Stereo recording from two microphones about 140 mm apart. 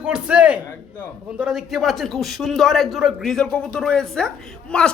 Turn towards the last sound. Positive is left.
turn(degrees=5)  # may be behind; listen again after turning